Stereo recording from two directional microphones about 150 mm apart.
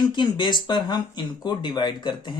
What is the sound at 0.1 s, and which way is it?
Speech, 30° left (ahead or behind).